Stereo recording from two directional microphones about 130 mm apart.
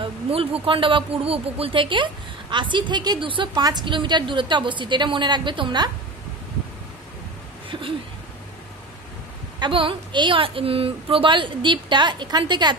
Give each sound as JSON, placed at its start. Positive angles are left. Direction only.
{"t": 0.0, "sound": "a woman's voice", "side_deg": -45}
{"t": 9.6, "sound": "a woman's voice", "side_deg": -40}